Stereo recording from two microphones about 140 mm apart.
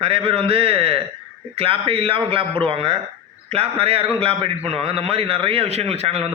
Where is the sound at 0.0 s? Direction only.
45° right (ahead or behind).